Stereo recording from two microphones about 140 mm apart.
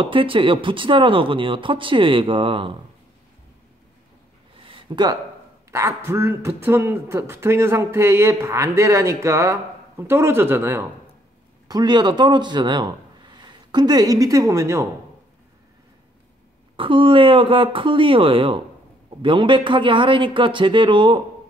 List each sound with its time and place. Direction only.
0.0 s speech: 40° right (ahead or behind)
4.6 s a sound: 35° right (ahead or behind)
5.7 s a man's voice: 20° right (ahead or behind)
11.6 s speech: 30° right (ahead or behind)
16.7 s speech: 35° right (ahead or behind)